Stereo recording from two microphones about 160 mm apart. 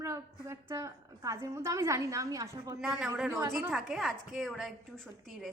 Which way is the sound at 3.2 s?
15° right (ahead or behind).